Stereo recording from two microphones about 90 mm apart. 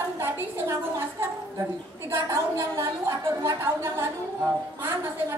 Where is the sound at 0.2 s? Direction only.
25° right (ahead or behind).